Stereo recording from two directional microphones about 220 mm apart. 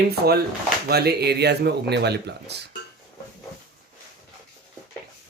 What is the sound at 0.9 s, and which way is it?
Speech, 45° right (ahead or behind).